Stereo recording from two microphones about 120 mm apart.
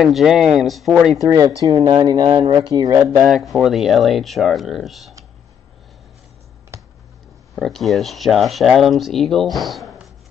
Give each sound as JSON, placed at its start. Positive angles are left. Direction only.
{"t": 0.0, "sound": "speech", "side_deg": 0}
{"t": 1.2, "sound": "speech", "side_deg": -30}
{"t": 3.0, "sound": "speech", "side_deg": 0}
{"t": 6.7, "sound": "a sound", "side_deg": -20}
{"t": 7.5, "sound": "speech", "side_deg": 0}